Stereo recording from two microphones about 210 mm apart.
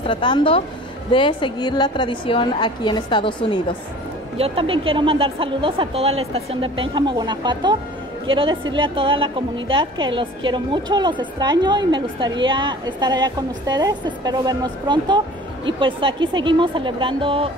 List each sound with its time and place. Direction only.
0.0 s a woman's voice: 20° left (ahead or behind)
4.4 s a woman's voice: 25° right (ahead or behind)